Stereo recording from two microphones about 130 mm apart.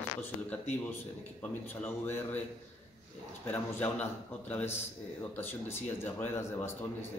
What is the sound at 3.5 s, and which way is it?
Speech, 15° left (ahead or behind).